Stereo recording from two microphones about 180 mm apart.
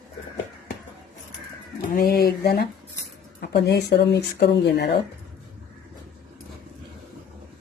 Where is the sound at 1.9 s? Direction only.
55° left (ahead or behind).